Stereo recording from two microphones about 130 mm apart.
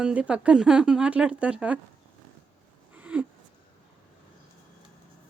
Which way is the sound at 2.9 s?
10° right (ahead or behind).